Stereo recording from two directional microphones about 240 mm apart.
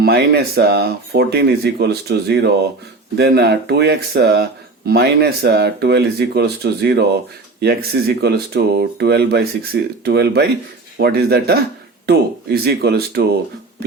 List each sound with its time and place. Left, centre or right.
0.0 s speech: right